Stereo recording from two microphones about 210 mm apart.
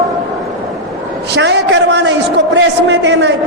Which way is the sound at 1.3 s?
55° right (ahead or behind).